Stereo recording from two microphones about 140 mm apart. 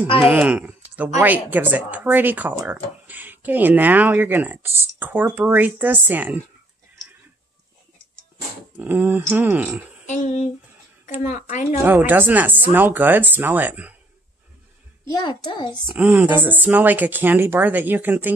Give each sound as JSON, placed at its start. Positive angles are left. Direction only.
{"t": 0.3, "sound": "speech", "side_deg": -10}
{"t": 8.7, "sound": "speech", "side_deg": -10}
{"t": 10.0, "sound": "speech", "side_deg": 60}
{"t": 11.8, "sound": "speech", "side_deg": -15}
{"t": 15.0, "sound": "a child's voice", "side_deg": 30}
{"t": 15.9, "sound": "speech", "side_deg": -10}